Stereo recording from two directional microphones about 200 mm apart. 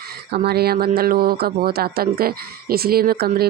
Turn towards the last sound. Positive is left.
turn(degrees=-50)  # may be behind; listen again after turning